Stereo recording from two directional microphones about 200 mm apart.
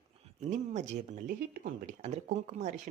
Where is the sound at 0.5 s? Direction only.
35° right (ahead or behind).